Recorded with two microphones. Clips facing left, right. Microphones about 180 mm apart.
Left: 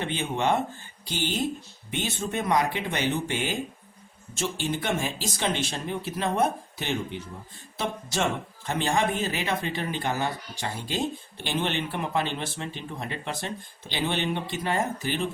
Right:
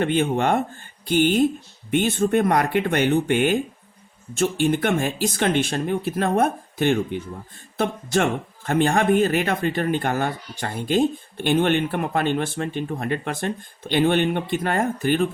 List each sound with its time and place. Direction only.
0.0 s speech: 55° right (ahead or behind)